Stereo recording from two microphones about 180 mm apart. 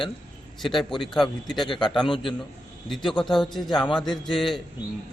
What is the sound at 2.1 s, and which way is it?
Speech, 25° left (ahead or behind).